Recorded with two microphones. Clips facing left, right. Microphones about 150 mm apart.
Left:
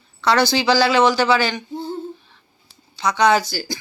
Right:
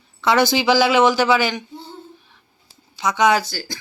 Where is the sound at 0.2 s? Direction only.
20° right (ahead or behind).